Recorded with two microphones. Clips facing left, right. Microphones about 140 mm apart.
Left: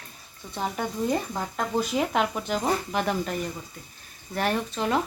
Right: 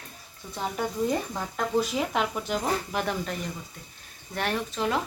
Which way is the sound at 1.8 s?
Centre (ahead or behind).